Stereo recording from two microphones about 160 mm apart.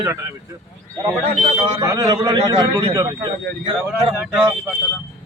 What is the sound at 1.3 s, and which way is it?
Speech, 40° right (ahead or behind).